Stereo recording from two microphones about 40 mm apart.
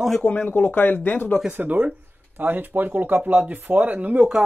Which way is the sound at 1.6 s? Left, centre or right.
Right.